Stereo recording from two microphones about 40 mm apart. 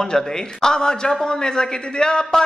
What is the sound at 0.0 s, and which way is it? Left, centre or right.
A man's voice, centre.